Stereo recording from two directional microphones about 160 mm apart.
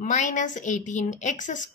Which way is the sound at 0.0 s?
50° left (ahead or behind).